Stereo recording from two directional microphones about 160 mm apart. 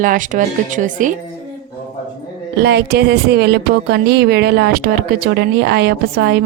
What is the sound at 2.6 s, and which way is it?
Speech, 90° right.